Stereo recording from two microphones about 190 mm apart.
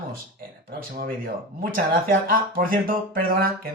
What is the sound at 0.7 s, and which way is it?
Speech, 50° right (ahead or behind).